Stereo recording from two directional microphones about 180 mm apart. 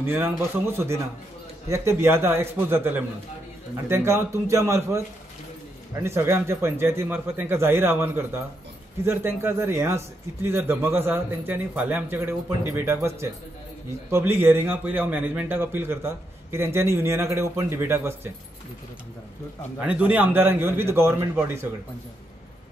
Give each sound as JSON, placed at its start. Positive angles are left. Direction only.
{"t": 0.0, "sound": "a man's voice", "side_deg": -15}
{"t": 19.8, "sound": "a man's voice", "side_deg": -5}